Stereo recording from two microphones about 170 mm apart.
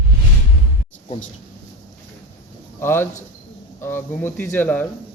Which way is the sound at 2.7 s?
15° left (ahead or behind).